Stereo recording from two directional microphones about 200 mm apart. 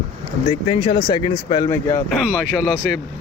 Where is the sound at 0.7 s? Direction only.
25° left (ahead or behind).